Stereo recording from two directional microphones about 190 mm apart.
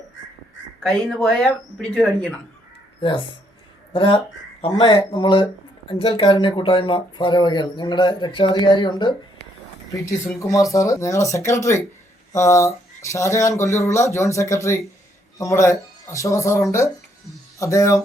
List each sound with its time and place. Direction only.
0.8 s speech: centre (ahead or behind)
3.0 s speech: 25° left (ahead or behind)